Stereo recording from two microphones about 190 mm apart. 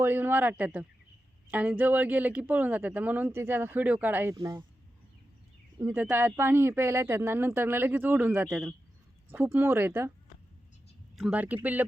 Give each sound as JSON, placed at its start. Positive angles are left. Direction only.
{"t": 0.0, "sound": "speech", "side_deg": -10}
{"t": 5.8, "sound": "speech", "side_deg": -10}
{"t": 11.2, "sound": "speech", "side_deg": -5}